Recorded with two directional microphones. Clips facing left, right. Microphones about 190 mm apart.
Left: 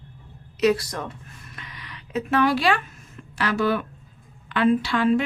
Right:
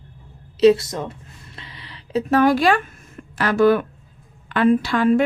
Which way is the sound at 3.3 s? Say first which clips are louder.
Right 7 dB; 50° right (ahead or behind).